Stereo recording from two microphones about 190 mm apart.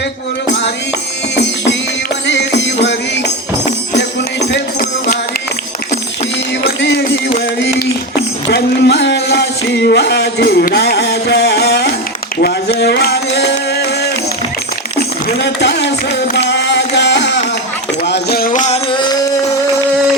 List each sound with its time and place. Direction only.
0.4 s music: 65° left (ahead or behind)
2.2 s music: 65° left (ahead or behind)
6.7 s music: 60° left (ahead or behind)
8.4 s a sound: 60° left (ahead or behind)
16.3 s music: 65° left (ahead or behind); by 18.8 s 40° left (ahead or behind)